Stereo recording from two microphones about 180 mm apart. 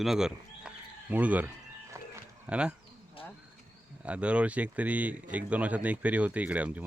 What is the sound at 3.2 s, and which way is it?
Bird, 30° left (ahead or behind).